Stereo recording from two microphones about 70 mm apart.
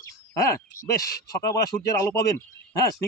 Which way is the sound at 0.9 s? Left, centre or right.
Left.